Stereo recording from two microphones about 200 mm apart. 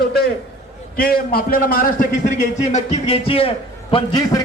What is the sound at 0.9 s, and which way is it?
A man's voice, 45° left (ahead or behind).